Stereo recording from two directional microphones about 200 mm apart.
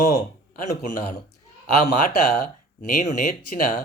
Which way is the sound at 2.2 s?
40° left (ahead or behind).